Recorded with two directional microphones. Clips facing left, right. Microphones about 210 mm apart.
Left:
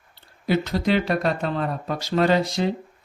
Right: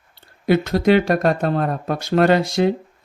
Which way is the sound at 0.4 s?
50° right (ahead or behind).